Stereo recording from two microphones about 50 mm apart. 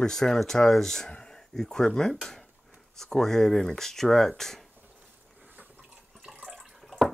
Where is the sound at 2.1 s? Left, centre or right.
Centre.